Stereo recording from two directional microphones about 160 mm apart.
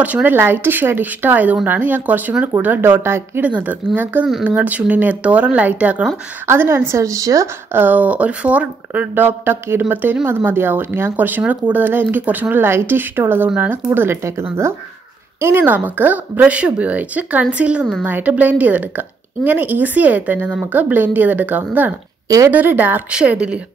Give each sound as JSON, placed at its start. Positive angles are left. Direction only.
{"t": 0.0, "sound": "speech", "side_deg": -10}
{"t": 15.4, "sound": "speech", "side_deg": -10}